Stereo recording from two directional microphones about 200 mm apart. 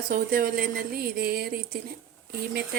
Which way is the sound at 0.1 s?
45° right (ahead or behind).